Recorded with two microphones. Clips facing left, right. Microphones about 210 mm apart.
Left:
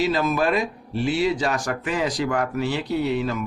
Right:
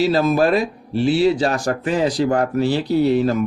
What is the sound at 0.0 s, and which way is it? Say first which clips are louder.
Speech: right 5 dB; 35° right (ahead or behind).